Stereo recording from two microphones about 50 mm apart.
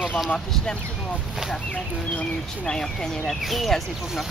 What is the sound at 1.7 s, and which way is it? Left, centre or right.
Speech, left.